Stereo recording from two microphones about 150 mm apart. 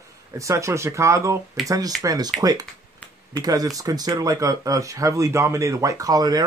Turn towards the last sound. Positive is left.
turn(degrees=-25)  # may be behind; listen again after turning